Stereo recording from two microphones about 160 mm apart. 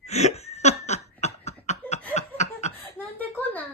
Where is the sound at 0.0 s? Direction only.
45° left (ahead or behind).